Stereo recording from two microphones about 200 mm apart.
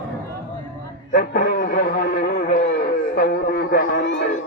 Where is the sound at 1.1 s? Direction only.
55° left (ahead or behind).